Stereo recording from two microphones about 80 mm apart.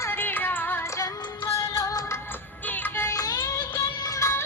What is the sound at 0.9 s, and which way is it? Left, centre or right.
Music, left.